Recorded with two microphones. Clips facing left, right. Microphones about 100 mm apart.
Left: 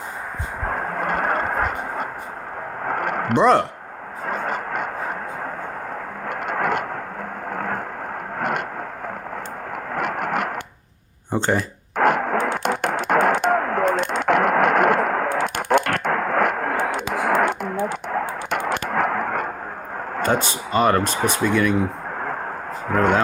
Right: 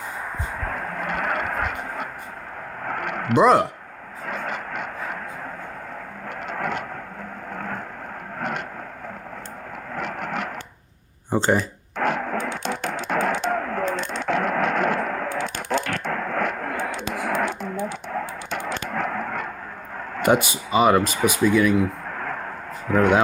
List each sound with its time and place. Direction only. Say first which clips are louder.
0.6 s vehicle: left 6 dB; 35° left (ahead or behind)
2.8 s a sound: left 4 dB; 40° left (ahead or behind)
3.3 s speech: even; 5° right (ahead or behind)
4.3 s vehicle: left 4 dB; 40° left (ahead or behind)
6.2 s vehicle: left 5 dB; 55° left (ahead or behind)
7.5 s a sound: left 5 dB; 50° left (ahead or behind)
8.4 s vehicle: left 4 dB; 55° left (ahead or behind)
9.9 s vehicle: left 5 dB; 55° left (ahead or behind)
11.3 s speech: right 1 dB; centre (ahead or behind)
11.9 s a sound: left 5 dB; 55° left (ahead or behind)
15.3 s radio: left 6 dB; 60° left (ahead or behind)
20.2 s speech: right 3 dB; 15° right (ahead or behind)
22.9 s speech: even; 45° left (ahead or behind)